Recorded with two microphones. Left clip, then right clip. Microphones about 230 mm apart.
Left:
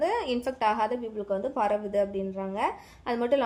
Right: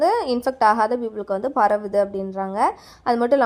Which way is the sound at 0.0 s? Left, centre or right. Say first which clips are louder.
Right 8 dB; right.